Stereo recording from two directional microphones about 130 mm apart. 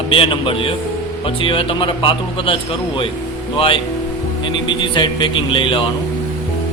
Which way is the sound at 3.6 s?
40° left (ahead or behind).